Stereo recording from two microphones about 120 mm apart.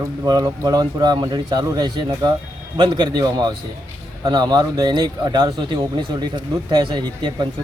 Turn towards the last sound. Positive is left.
turn(degrees=-40)  # may be behind; listen again after turning